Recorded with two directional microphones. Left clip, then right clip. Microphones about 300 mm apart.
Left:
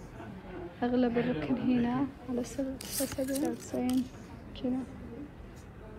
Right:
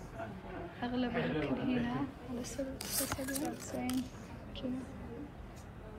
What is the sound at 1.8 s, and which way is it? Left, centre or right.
A woman's voice, left.